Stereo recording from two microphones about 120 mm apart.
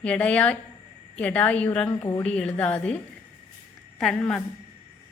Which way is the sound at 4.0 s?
5° left (ahead or behind).